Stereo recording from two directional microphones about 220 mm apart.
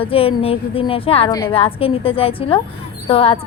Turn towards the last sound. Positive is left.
turn(degrees=25)  # may be behind; listen again after turning